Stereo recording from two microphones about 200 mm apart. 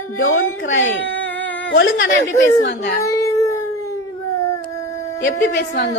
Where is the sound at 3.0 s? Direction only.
15° left (ahead or behind).